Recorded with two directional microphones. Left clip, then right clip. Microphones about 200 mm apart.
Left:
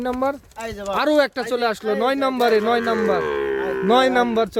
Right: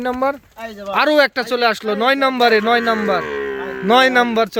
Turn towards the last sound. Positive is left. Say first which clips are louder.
# right 3 dB
turn(degrees=5)  # may be behind; listen again after turning